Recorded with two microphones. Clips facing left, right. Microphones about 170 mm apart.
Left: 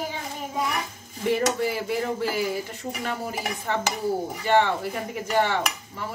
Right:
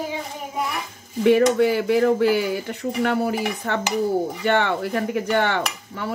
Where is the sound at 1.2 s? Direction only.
70° right (ahead or behind).